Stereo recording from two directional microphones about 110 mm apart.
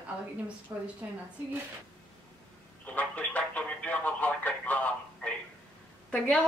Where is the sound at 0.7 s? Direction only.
20° right (ahead or behind).